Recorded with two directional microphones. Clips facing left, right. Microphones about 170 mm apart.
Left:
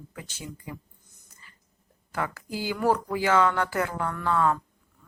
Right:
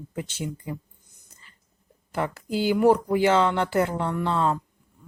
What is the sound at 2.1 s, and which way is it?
Speech, 20° right (ahead or behind).